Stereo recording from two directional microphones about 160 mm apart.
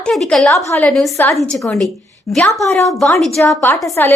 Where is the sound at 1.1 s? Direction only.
15° left (ahead or behind).